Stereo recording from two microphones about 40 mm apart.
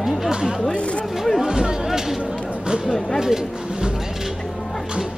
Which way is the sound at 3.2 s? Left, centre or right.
Centre.